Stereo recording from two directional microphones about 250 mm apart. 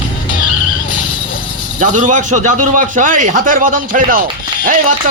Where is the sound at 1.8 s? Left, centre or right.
Right.